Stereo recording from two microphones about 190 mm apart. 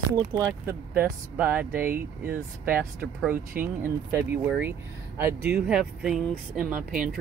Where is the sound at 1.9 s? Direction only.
50° right (ahead or behind).